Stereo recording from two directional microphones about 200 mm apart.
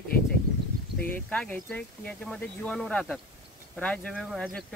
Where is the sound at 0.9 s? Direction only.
5° left (ahead or behind).